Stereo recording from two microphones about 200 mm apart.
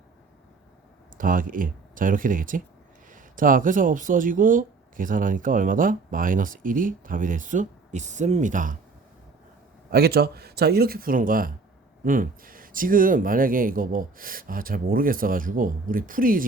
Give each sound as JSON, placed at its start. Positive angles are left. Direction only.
{"t": 1.2, "sound": "speech", "side_deg": -45}
{"t": 9.9, "sound": "speech", "side_deg": -50}